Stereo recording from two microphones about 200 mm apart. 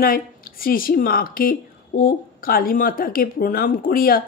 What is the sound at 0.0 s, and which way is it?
Speech, 45° left (ahead or behind).